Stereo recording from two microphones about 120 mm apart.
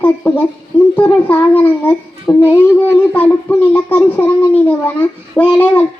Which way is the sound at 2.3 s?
25° left (ahead or behind).